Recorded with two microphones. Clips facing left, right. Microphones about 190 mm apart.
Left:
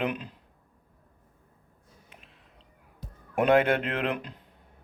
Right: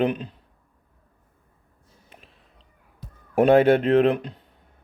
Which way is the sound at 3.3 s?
35° right (ahead or behind).